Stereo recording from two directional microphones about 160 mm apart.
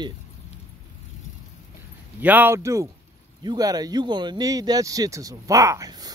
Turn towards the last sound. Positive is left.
turn(degrees=-25)  # may be behind; listen again after turning